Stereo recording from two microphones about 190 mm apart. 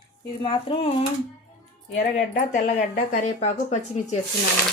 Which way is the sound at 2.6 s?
40° left (ahead or behind).